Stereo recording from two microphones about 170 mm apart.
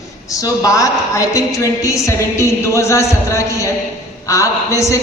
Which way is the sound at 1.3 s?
20° left (ahead or behind).